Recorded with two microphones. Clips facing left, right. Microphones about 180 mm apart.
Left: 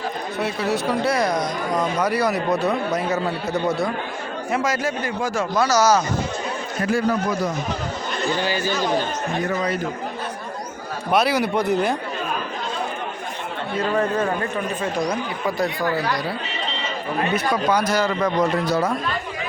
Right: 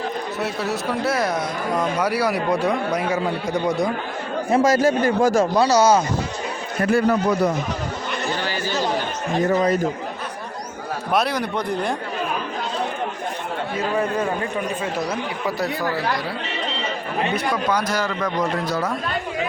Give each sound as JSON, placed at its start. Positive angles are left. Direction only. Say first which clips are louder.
{"t": 0.3, "sound": "a man's voice", "louder": "left 4 dB", "side_deg": 0}
{"t": 4.5, "sound": "speech", "louder": "right 7 dB", "side_deg": -40}
{"t": 6.8, "sound": "speech", "louder": "right 3 dB", "side_deg": -60}
{"t": 8.4, "sound": "speech", "louder": "left 3 dB", "side_deg": 15}
{"t": 9.5, "sound": "speech", "louder": "right 8 dB", "side_deg": -40}
{"t": 11.1, "sound": "speech", "louder": "left 3 dB", "side_deg": 5}
{"t": 13.9, "sound": "a man's voice", "louder": "left 1 dB", "side_deg": -10}
{"t": 17.3, "sound": "speech", "louder": "left 3 dB", "side_deg": 5}